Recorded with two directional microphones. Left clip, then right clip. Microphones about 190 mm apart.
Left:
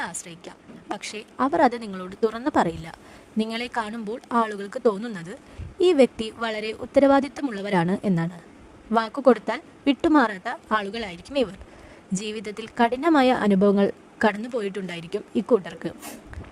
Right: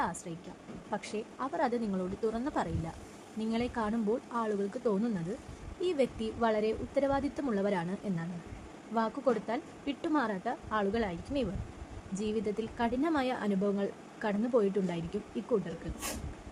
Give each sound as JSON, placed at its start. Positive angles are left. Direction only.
{"t": 1.0, "sound": "speech", "side_deg": 55}
{"t": 12.1, "sound": "speech", "side_deg": 60}